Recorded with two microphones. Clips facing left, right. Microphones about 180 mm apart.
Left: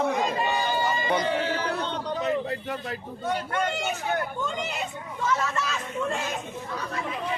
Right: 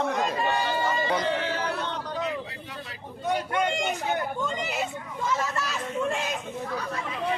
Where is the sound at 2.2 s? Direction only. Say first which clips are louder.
Left 5 dB; 50° left (ahead or behind).